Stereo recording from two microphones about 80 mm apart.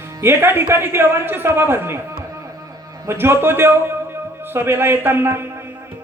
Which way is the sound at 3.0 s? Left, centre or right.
Right.